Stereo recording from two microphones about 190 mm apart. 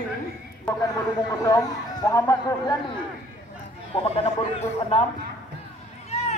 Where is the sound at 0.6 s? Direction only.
20° left (ahead or behind).